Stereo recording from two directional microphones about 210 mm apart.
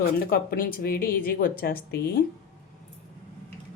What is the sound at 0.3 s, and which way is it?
A woman's voice, 45° left (ahead or behind).